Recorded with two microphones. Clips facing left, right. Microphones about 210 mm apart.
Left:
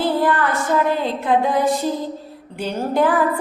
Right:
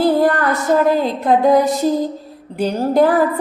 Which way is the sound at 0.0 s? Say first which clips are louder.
Right 4 dB; 40° right (ahead or behind).